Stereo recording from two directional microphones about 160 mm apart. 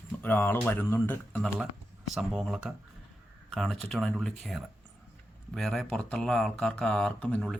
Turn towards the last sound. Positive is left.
turn(degrees=10)  # may be behind; listen again after turning